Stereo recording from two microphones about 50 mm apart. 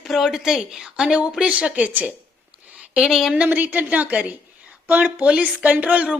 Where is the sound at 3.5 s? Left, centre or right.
Right.